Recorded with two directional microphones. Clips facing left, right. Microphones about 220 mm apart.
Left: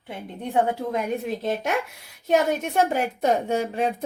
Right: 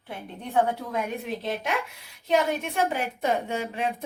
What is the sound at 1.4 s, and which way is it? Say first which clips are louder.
A woman's voice: left 4 dB; 45° left (ahead or behind).